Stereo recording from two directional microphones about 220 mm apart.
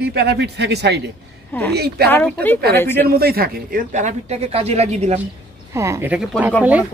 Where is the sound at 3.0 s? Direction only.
45° right (ahead or behind).